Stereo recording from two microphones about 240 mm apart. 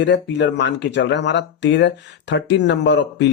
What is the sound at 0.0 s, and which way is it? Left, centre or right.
Speech, left.